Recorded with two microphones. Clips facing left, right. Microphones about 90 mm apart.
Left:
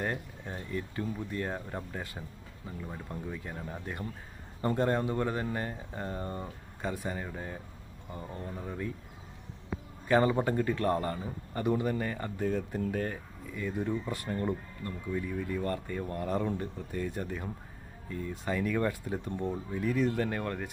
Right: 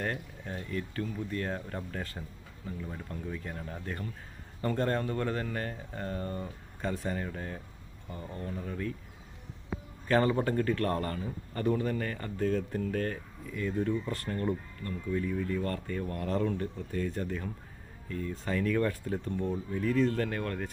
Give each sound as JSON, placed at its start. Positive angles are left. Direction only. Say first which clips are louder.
{"t": 0.0, "sound": "a man's voice", "louder": "left 1 dB", "side_deg": 15}
{"t": 10.1, "sound": "a man's voice", "louder": "left 1 dB", "side_deg": 15}